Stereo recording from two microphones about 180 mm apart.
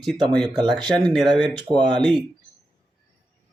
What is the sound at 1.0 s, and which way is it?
Speech, 25° right (ahead or behind).